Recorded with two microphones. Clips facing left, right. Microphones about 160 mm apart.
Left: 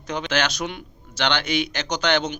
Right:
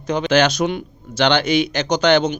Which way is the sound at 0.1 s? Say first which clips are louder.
Right 8 dB; 40° right (ahead or behind).